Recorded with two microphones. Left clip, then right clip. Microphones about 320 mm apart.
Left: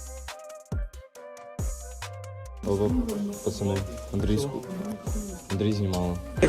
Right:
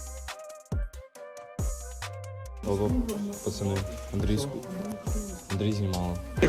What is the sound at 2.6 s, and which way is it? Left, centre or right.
Speech, centre.